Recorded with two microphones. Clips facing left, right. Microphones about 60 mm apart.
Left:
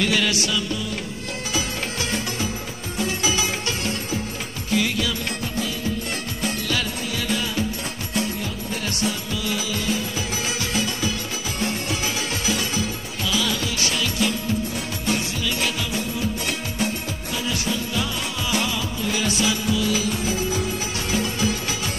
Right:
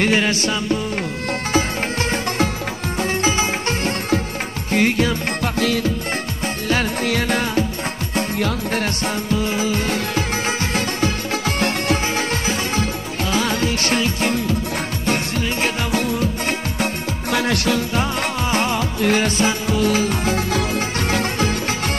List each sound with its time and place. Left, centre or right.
0.0 s music: right
5.4 s music: right
6.4 s music: right
7.0 s music: right
8.4 s music: right
15.9 s music: right
17.3 s music: right
17.9 s music: right